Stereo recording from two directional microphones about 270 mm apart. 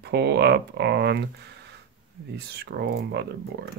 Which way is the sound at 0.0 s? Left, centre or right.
Right.